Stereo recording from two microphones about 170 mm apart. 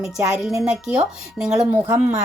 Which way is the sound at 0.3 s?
5° right (ahead or behind).